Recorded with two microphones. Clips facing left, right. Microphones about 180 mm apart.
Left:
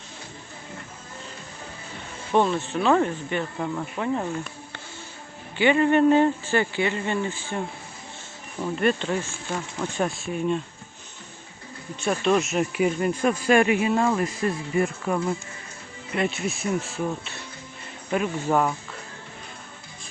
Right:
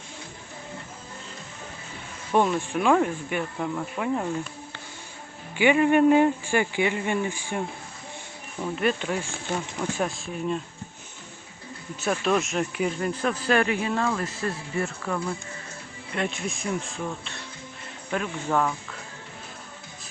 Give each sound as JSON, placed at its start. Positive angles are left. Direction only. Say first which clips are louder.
{"t": 2.3, "sound": "speech", "louder": "left 1 dB", "side_deg": -10}
{"t": 5.5, "sound": "speech", "louder": "even", "side_deg": -10}
{"t": 8.6, "sound": "speech", "louder": "left 2 dB", "side_deg": 0}
{"t": 12.2, "sound": "speech", "louder": "left 4 dB", "side_deg": 0}
{"t": 16.1, "sound": "speech", "louder": "left 3 dB", "side_deg": 5}